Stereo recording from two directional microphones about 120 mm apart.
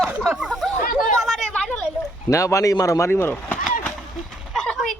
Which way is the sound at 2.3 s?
25° left (ahead or behind).